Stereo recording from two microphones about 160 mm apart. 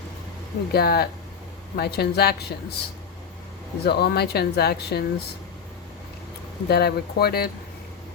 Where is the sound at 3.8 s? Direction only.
85° left.